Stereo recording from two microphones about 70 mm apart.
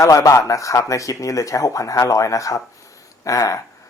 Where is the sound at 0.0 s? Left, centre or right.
Left.